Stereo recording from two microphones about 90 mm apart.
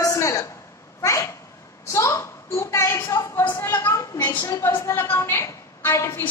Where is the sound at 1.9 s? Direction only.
35° left (ahead or behind).